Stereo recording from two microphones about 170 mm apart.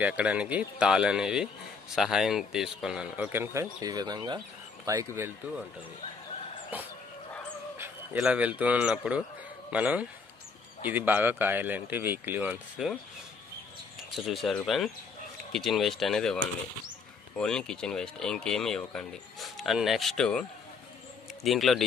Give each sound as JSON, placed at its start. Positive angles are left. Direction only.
{"t": 0.0, "sound": "speech", "side_deg": -10}
{"t": 6.7, "sound": "speech", "side_deg": -10}
{"t": 14.1, "sound": "speech", "side_deg": 0}